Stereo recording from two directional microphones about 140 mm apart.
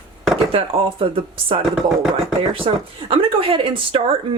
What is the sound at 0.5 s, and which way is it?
Speech, 40° right (ahead or behind).